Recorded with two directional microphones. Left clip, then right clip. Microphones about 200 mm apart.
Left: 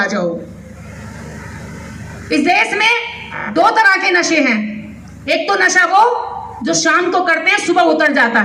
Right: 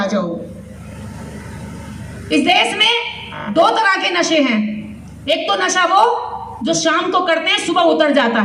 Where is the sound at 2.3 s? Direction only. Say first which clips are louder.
Left 1 dB; 15° right (ahead or behind).